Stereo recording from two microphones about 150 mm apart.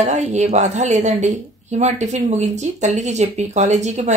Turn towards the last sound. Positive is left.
turn(degrees=-50)  # may be behind; listen again after turning